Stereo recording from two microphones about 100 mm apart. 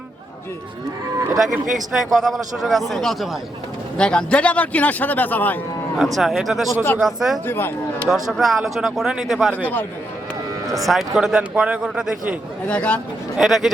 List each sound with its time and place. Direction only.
1.4 s a man's voice: 5° right (ahead or behind); by 5.5 s 15° left (ahead or behind)
6.1 s a man's voice: centre (ahead or behind)
7.4 s speech: 20° left (ahead or behind)
8.0 s a man's voice: centre (ahead or behind)
9.5 s speech: 15° left (ahead or behind)
10.8 s a man's voice: 5° right (ahead or behind)
12.6 s speech: 10° left (ahead or behind)
13.3 s a man's voice: centre (ahead or behind)